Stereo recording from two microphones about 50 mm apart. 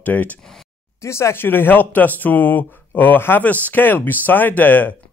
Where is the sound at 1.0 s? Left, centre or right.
Left.